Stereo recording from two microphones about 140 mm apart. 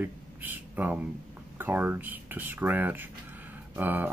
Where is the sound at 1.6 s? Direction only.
15° right (ahead or behind).